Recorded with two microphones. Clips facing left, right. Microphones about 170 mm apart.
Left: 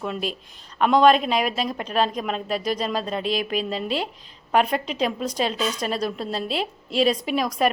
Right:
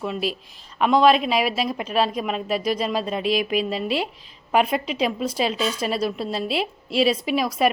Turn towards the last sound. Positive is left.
turn(degrees=-5)  # may be behind; listen again after turning